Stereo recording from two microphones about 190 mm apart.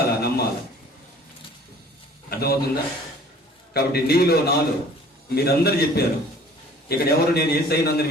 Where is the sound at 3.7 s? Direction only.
55° left (ahead or behind).